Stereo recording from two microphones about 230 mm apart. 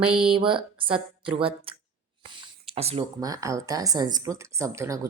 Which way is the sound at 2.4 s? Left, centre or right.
Right.